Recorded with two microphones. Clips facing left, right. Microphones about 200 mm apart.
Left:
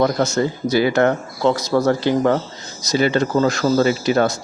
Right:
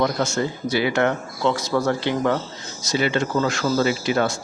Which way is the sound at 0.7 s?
40° left (ahead or behind).